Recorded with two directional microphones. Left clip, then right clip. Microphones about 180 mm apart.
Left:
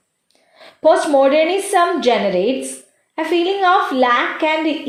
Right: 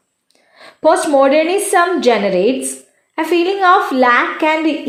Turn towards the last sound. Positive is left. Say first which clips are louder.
# right 3 dB
turn(degrees=-20)  # may be behind; listen again after turning